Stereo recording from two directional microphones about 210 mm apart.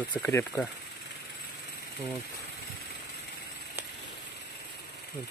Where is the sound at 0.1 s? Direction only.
10° left (ahead or behind).